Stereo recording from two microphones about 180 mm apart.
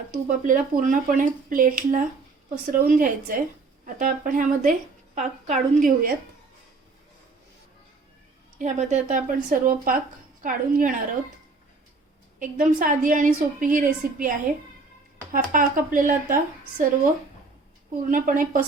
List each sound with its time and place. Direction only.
0.1 s a woman's voice: 50° right (ahead or behind)
8.5 s a woman's voice: 40° right (ahead or behind)
12.4 s a woman's voice: 50° right (ahead or behind)
17.9 s a woman's voice: 50° right (ahead or behind)